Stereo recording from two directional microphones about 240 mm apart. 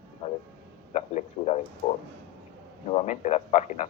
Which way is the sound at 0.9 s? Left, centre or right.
Left.